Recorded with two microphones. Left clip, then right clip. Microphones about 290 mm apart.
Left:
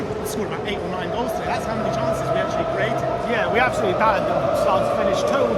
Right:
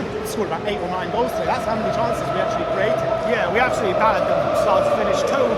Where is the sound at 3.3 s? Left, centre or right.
Centre.